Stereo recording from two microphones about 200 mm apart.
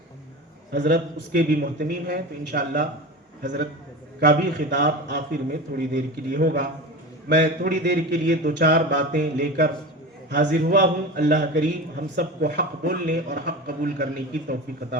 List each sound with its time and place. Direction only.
0.7 s a man's voice: 55° right (ahead or behind)
8.3 s mantra: 50° right (ahead or behind)
9.1 s a man's voice: 45° right (ahead or behind)